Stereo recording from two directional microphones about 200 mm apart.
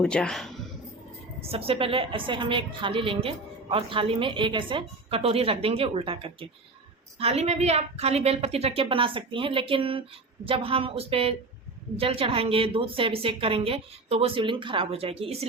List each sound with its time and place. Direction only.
0.0 s speech: 5° left (ahead or behind)
1.4 s a woman's voice: 30° right (ahead or behind)